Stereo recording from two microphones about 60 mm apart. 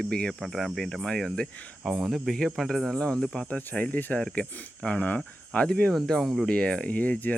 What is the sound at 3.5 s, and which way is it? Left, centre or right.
Speech, left.